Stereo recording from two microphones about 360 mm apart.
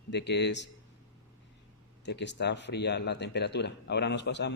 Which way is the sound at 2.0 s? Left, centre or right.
Left.